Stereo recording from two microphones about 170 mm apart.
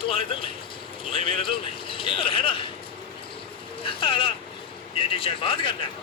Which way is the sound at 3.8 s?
30° left (ahead or behind).